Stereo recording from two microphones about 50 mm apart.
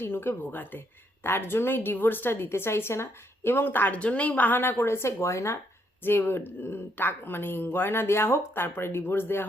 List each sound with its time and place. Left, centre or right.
0.0 s speech: left
1.2 s speech: left
2.5 s a woman's voice: left
3.5 s speech: left
4.0 s speech: left
6.0 s speech: left